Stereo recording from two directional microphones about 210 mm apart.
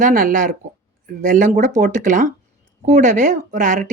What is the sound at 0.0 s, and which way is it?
Speech, 40° right (ahead or behind).